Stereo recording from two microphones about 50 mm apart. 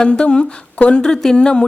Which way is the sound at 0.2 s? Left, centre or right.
Left.